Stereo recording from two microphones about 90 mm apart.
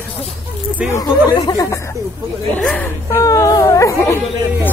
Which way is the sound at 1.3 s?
45° left (ahead or behind).